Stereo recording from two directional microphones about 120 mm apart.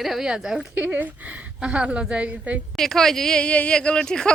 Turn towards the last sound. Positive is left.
turn(degrees=5)  # may be behind; listen again after turning